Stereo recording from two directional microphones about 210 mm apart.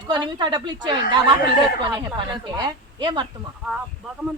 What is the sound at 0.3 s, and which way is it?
A man's voice, 20° right (ahead or behind).